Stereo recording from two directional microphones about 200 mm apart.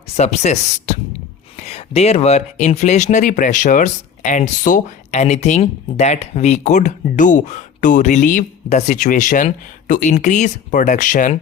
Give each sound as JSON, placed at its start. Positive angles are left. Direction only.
{"t": 0.2, "sound": "speech", "side_deg": 35}